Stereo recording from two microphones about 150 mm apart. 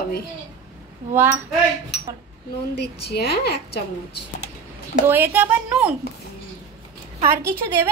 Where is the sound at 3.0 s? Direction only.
90° left.